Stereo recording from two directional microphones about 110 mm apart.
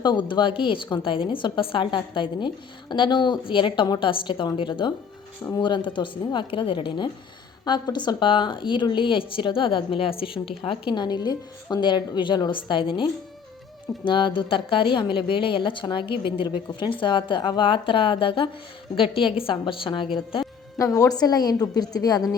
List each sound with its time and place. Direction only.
0.0 s a woman's voice: 45° left (ahead or behind)
20.7 s a woman's voice: 30° left (ahead or behind)